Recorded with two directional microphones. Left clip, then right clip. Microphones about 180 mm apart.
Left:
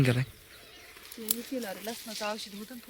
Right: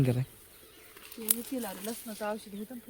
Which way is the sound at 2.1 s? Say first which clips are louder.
Left 1 dB; 60° right (ahead or behind).